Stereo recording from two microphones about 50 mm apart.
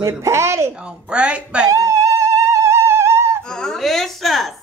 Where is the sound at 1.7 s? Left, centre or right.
Right.